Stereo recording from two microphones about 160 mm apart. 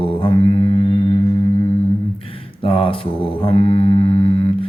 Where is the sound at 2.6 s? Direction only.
35° left (ahead or behind).